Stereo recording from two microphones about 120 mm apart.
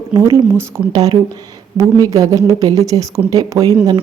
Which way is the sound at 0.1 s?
20° right (ahead or behind).